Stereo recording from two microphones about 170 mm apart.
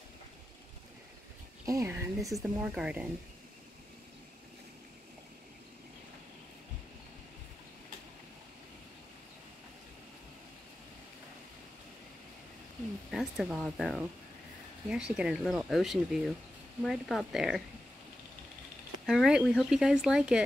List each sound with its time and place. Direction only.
1.7 s a woman's voice: 15° right (ahead or behind)
2.3 s speech: 5° right (ahead or behind)
13.1 s speech: centre (ahead or behind)
19.0 s speech: centre (ahead or behind)